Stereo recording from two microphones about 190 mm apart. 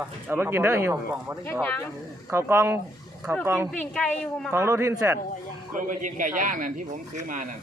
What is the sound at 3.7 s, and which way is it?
Speech, 5° left (ahead or behind).